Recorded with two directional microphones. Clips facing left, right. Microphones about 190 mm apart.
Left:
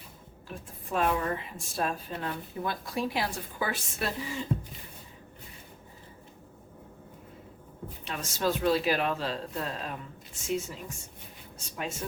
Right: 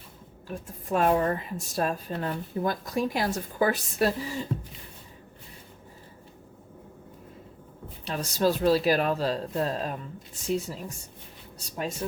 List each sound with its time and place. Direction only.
0.4 s speech: 45° right (ahead or behind)
8.0 s speech: 35° right (ahead or behind)